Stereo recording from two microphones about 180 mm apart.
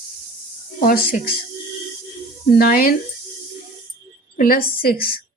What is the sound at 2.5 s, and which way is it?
Speech, 55° left (ahead or behind).